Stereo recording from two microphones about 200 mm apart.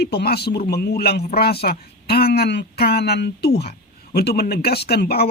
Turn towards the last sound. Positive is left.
turn(degrees=50)  # may be behind; listen again after turning